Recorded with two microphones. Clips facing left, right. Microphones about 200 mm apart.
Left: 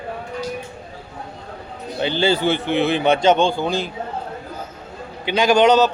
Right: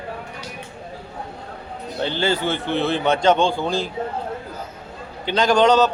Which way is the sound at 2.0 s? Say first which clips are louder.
Left 3 dB; 15° left (ahead or behind).